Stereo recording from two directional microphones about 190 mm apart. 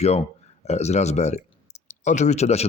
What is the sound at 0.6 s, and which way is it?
Speech, 35° left (ahead or behind).